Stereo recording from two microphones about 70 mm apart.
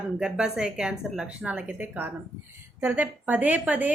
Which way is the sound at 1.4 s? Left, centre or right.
Right.